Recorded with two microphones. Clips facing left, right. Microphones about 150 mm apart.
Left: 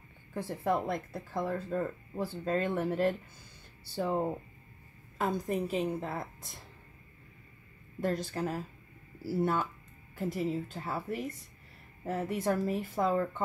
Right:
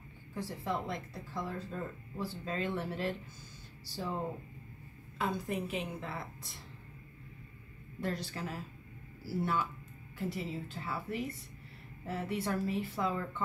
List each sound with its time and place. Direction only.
0.3 s speech: 50° left (ahead or behind)
5.2 s speech: 40° left (ahead or behind)
8.0 s speech: 45° left (ahead or behind)